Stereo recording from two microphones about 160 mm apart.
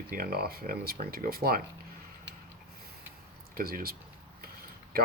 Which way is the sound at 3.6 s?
65° right (ahead or behind).